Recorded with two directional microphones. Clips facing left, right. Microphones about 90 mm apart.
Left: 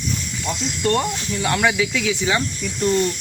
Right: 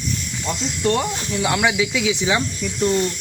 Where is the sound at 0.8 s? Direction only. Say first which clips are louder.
Even; 5° right (ahead or behind).